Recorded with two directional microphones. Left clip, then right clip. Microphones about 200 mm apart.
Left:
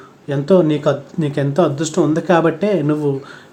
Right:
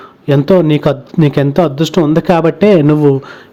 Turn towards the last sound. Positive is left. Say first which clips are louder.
# right 9 dB
turn(degrees=-35)  # may be behind; listen again after turning